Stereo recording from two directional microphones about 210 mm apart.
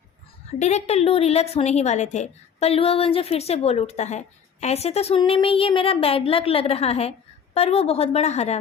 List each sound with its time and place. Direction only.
0.6 s a woman's voice: 30° left (ahead or behind)